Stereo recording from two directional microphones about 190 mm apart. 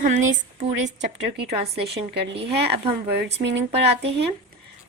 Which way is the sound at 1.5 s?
30° right (ahead or behind).